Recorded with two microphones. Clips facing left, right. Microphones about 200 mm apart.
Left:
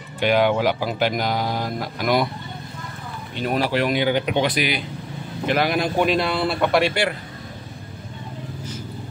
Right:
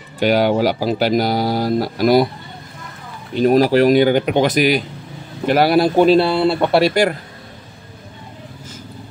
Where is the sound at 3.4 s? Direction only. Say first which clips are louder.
Right 9 dB; 40° right (ahead or behind).